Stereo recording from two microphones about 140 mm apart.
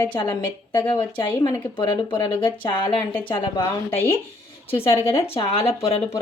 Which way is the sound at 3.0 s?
10° left (ahead or behind).